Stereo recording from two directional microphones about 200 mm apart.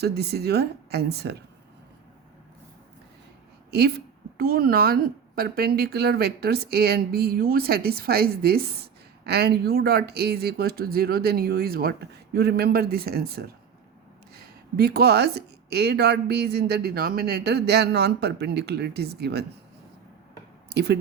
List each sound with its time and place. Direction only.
0.0 s a woman's voice: 55° right (ahead or behind)
3.7 s a woman's voice: 55° right (ahead or behind)
14.3 s a sound: 50° right (ahead or behind)
15.7 s a woman's voice: 55° right (ahead or behind)
20.7 s speech: 55° right (ahead or behind)